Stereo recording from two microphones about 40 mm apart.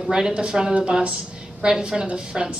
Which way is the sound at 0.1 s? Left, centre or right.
Right.